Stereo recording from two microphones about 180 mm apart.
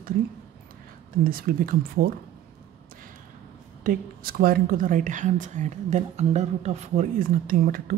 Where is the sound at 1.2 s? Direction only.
55° right (ahead or behind).